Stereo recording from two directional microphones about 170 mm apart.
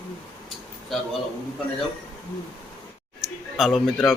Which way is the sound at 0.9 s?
Centre (ahead or behind).